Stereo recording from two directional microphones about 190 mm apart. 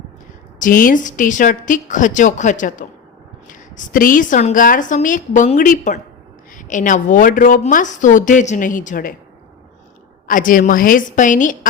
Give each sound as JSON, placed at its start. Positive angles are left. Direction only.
{"t": 0.6, "sound": "a woman's voice", "side_deg": 45}
{"t": 10.2, "sound": "a woman's voice", "side_deg": 45}